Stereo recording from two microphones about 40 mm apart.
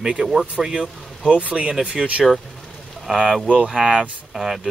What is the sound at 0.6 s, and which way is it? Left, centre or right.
Speech, right.